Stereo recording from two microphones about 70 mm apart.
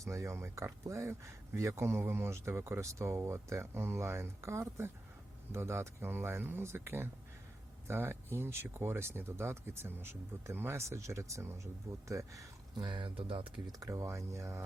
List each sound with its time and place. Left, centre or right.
0.0 s speech: right
12.7 s speech: right
13.7 s speech: right